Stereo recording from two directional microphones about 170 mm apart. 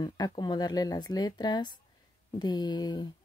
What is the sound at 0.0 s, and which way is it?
Speech, 25° left (ahead or behind).